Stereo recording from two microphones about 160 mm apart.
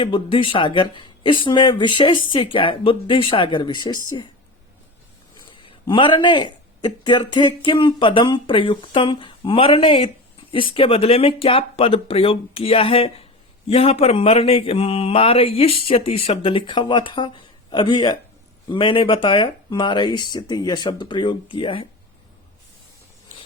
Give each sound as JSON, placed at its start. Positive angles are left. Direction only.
{"t": 0.0, "sound": "speech", "side_deg": 35}
{"t": 5.5, "sound": "speech", "side_deg": 30}